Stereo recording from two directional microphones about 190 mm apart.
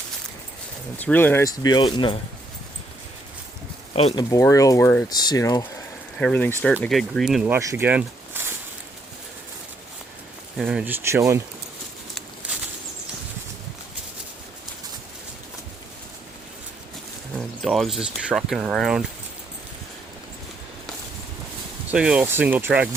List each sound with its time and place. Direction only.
0.9 s speech: 10° left (ahead or behind)
3.9 s speech: 30° left (ahead or behind)
4.2 s speech: 15° left (ahead or behind)
6.1 s speech: 5° left (ahead or behind)
7.4 s speech: 15° right (ahead or behind)
10.6 s speech: centre (ahead or behind)
17.3 s speech: centre (ahead or behind)
21.8 s speech: 5° right (ahead or behind)